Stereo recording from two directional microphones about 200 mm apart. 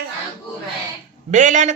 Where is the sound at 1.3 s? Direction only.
40° right (ahead or behind).